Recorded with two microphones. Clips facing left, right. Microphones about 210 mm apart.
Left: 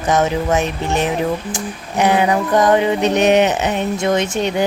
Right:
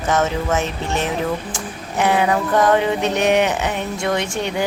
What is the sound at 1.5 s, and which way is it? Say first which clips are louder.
Music: left 3 dB; 15° left (ahead or behind).